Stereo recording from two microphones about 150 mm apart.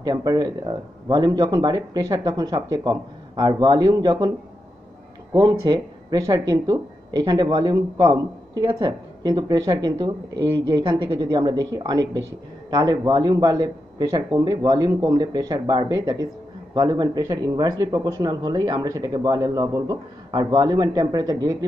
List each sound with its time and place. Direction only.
0.0 s speech: 25° right (ahead or behind)
5.3 s speech: 25° right (ahead or behind)